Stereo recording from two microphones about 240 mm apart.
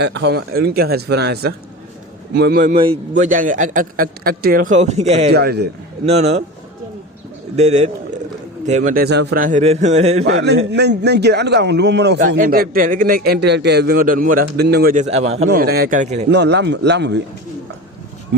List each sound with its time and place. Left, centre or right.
0.0 s a man's voice: right
5.3 s speech: right
6.1 s a man's voice: right
7.5 s a man's voice: right
10.2 s a man's voice: right
15.4 s a man's voice: right
16.3 s speech: right